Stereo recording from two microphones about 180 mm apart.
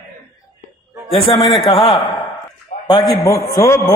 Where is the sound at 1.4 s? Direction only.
30° left (ahead or behind).